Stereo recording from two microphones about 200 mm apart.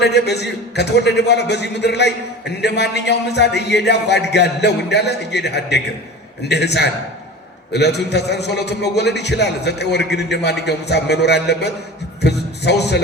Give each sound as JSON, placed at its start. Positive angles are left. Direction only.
{"t": 0.0, "sound": "a man's voice", "side_deg": 55}